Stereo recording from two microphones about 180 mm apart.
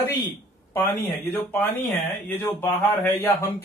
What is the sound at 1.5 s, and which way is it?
A man's voice, 10° left (ahead or behind).